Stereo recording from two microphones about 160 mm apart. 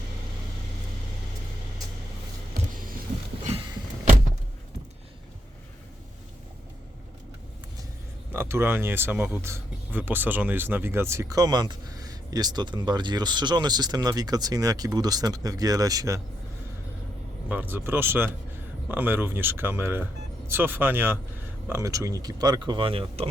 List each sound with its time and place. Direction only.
8.3 s speech: 15° right (ahead or behind)
17.5 s speech: 10° right (ahead or behind); by 23.3 s 35° right (ahead or behind)